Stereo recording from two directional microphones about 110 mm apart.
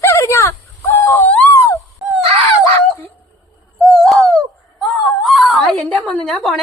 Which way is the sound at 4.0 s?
5° left (ahead or behind).